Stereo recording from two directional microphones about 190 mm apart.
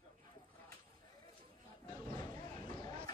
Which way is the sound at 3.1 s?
20° left (ahead or behind).